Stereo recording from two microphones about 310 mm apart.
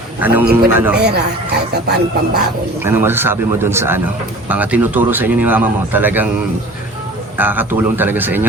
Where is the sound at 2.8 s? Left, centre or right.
Centre.